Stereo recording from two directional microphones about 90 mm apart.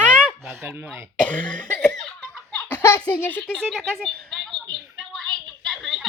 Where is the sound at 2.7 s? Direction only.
25° left (ahead or behind).